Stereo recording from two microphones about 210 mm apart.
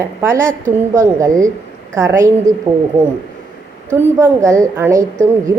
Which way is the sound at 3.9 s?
10° right (ahead or behind).